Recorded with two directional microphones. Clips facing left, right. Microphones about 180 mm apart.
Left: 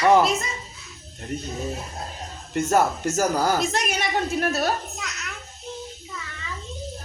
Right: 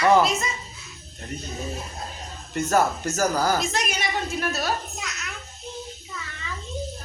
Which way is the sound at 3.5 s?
60° left (ahead or behind).